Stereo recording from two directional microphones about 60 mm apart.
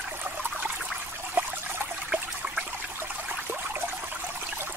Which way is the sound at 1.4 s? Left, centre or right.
Right.